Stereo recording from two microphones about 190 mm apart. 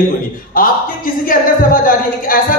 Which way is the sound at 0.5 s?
50° left (ahead or behind).